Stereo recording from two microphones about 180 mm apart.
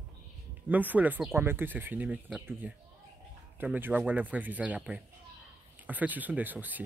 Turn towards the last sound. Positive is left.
turn(degrees=-10)  # may be behind; listen again after turning